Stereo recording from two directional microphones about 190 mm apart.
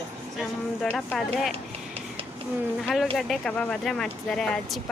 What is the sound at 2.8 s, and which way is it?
Speech, centre (ahead or behind).